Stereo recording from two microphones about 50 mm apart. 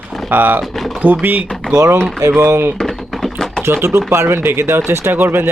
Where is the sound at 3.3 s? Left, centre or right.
Centre.